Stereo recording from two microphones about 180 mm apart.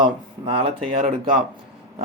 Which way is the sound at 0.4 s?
30° right (ahead or behind).